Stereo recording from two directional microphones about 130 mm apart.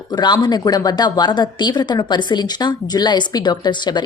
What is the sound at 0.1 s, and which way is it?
A woman's voice, 35° left (ahead or behind).